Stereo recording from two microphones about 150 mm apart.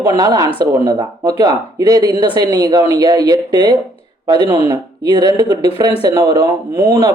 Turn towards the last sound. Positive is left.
turn(degrees=-25)  # may be behind; listen again after turning